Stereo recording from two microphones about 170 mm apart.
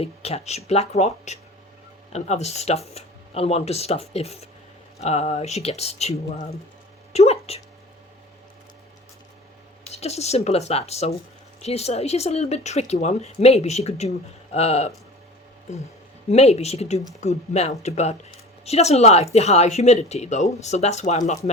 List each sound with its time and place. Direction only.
0.0 s speech: 40° left (ahead or behind)
7.1 s a sound: 40° left (ahead or behind)
9.9 s speech: 40° left (ahead or behind)
16.3 s speech: 40° left (ahead or behind)